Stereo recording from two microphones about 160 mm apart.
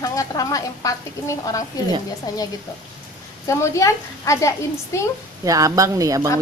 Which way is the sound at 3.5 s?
20° left (ahead or behind).